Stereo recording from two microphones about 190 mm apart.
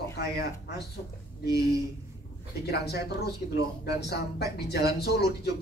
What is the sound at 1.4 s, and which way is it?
Speech, 60° left (ahead or behind).